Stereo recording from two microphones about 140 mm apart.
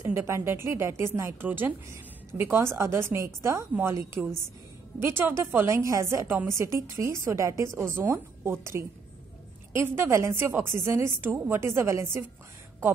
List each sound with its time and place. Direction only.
0.0 s a woman's voice: 20° right (ahead or behind)
5.0 s a woman's voice: 15° right (ahead or behind)